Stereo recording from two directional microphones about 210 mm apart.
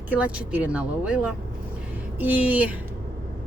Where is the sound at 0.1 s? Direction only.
5° right (ahead or behind).